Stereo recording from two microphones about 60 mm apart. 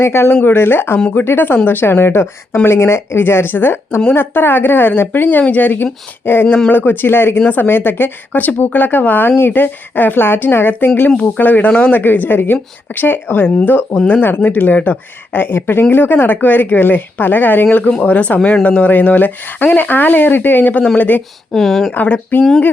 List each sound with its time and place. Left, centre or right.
0.0 s speech: left
21.5 s speech: centre
22.0 s speech: left